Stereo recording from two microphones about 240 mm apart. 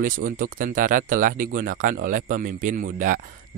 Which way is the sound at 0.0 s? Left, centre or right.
Right.